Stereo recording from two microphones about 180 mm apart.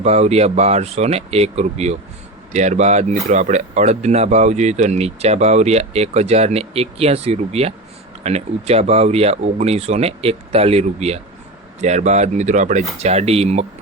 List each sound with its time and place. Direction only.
0.0 s speech: 35° right (ahead or behind)